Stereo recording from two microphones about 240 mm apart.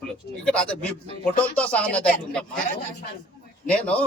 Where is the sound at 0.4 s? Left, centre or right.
Centre.